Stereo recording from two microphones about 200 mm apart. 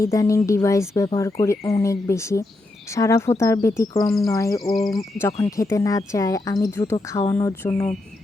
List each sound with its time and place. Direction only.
0.0 s speech: 15° left (ahead or behind)
4.7 s speech: centre (ahead or behind)
5.2 s speech: 15° left (ahead or behind)